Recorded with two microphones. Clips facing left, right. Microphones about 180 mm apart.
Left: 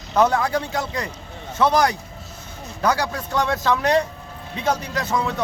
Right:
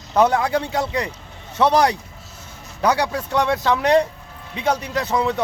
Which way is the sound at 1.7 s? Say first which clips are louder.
Right 3 dB; 30° right (ahead or behind).